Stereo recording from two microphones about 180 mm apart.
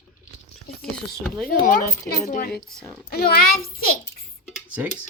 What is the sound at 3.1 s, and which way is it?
Speech, 55° left (ahead or behind).